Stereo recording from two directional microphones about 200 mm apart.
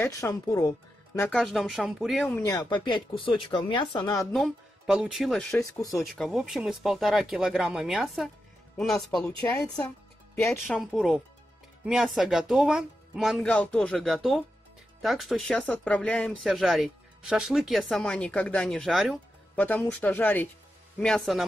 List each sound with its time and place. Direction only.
0.0 s speech: 15° left (ahead or behind)
1.3 s speech: centre (ahead or behind); by 4.3 s 20° left (ahead or behind)
4.3 s speech: centre (ahead or behind)
9.4 s speech: 15° left (ahead or behind)
10.6 s speech: centre (ahead or behind)